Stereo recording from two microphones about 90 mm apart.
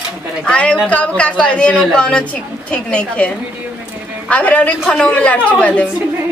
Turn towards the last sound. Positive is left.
turn(degrees=15)  # may be behind; listen again after turning